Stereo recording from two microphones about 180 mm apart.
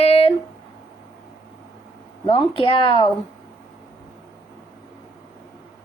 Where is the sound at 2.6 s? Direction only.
30° left (ahead or behind).